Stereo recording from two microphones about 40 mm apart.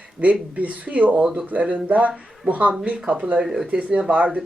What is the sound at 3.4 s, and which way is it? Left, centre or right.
Speech, centre.